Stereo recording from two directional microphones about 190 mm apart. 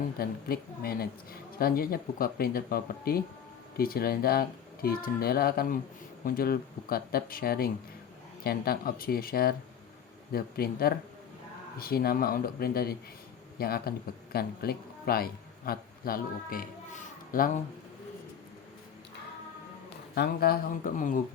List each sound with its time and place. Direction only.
0.2 s a man's voice: 50° left (ahead or behind)
20.1 s speech: 55° left (ahead or behind)